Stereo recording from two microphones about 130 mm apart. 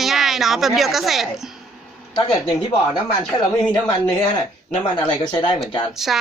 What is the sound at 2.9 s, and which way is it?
Speech, 35° left (ahead or behind).